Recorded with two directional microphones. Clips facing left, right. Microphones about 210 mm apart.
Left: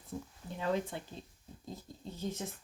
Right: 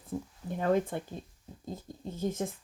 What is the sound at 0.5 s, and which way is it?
Speech, 50° right (ahead or behind).